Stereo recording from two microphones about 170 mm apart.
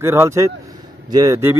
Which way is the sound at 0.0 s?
15° right (ahead or behind).